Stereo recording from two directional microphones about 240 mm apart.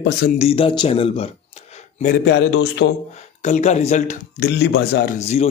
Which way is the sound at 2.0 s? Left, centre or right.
Left.